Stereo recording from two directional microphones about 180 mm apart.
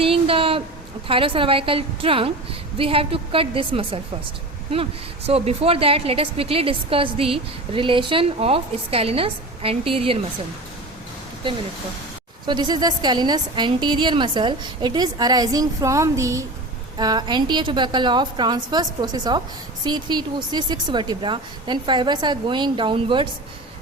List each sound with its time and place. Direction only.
0.0 s a sound: 30° right (ahead or behind)
1.0 s a woman's voice: 30° right (ahead or behind)
12.5 s a woman's voice: 25° right (ahead or behind)